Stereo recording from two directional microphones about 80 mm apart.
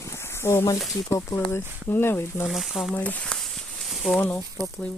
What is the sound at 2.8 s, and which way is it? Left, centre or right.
Speech, centre.